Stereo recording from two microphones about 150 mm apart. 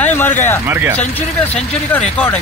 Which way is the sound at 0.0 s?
10° left (ahead or behind).